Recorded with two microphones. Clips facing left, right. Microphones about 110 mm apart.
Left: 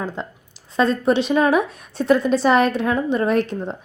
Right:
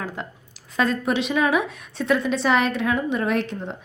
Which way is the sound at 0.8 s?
30° left (ahead or behind).